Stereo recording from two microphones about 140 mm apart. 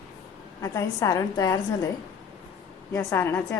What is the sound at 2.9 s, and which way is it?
Speech, 20° left (ahead or behind).